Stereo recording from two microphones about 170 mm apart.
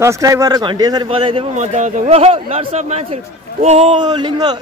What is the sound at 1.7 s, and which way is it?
Speech, 45° right (ahead or behind).